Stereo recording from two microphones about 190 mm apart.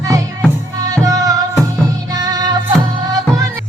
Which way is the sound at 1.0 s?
20° right (ahead or behind).